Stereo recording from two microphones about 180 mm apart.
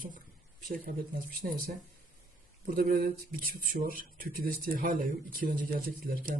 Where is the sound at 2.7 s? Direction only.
55° right (ahead or behind).